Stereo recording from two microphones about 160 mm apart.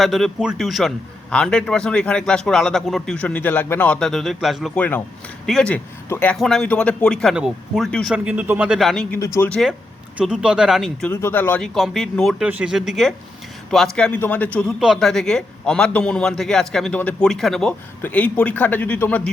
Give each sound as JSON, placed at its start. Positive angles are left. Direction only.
{"t": 0.0, "sound": "a man's voice", "side_deg": 0}
{"t": 8.1, "sound": "speech", "side_deg": -10}
{"t": 9.1, "sound": "speech", "side_deg": 15}
{"t": 9.5, "sound": "a man's voice", "side_deg": 0}
{"t": 11.1, "sound": "a man's voice", "side_deg": 15}
{"t": 14.8, "sound": "a man's voice", "side_deg": 0}